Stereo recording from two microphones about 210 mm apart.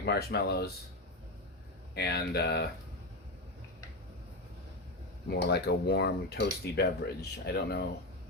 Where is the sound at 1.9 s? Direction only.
50° left (ahead or behind).